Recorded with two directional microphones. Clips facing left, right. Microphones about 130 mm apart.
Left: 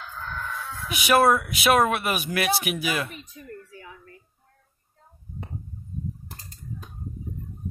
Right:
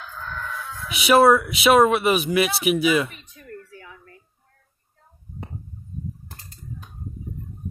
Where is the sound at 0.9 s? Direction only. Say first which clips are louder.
Right 4 dB; centre (ahead or behind).